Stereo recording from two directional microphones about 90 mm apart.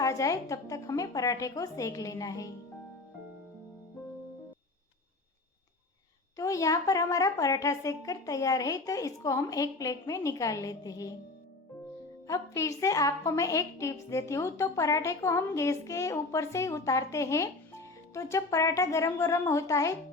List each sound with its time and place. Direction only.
0.0 s a woman's voice: 40° left (ahead or behind)
6.3 s a woman's voice: 35° left (ahead or behind)
12.3 s a woman's voice: 35° left (ahead or behind)